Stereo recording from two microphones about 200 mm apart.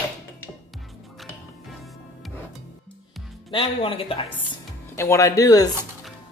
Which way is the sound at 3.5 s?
25° left (ahead or behind).